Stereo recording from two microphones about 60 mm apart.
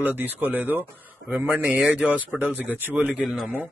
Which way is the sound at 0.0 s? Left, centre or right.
Right.